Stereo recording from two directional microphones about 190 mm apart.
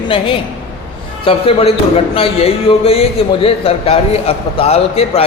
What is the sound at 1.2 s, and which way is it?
Speech, 30° left (ahead or behind).